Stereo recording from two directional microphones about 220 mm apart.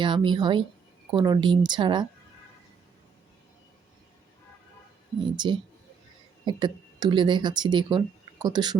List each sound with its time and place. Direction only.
0.0 s speech: 20° right (ahead or behind)
5.2 s speech: 20° right (ahead or behind)